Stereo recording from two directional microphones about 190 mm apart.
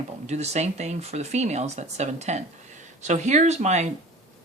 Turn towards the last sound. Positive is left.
turn(degrees=-35)  # may be behind; listen again after turning